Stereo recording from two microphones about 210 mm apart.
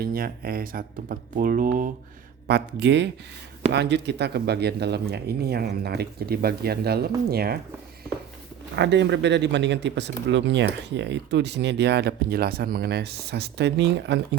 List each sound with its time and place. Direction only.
0.0 s speech: 45° right (ahead or behind)
2.5 s speech: 50° right (ahead or behind)
8.7 s speech: 55° right (ahead or behind)